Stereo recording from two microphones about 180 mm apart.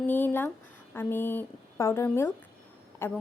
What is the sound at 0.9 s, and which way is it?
Speech, 10° left (ahead or behind).